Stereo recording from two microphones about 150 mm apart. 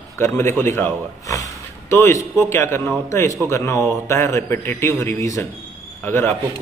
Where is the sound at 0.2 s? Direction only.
15° left (ahead or behind).